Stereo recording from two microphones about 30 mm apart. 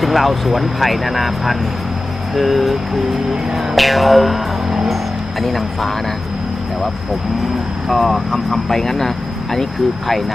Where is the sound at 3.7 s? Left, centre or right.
Centre.